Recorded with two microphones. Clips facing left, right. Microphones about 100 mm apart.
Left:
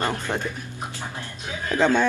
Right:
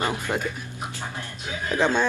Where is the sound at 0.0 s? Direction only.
10° right (ahead or behind).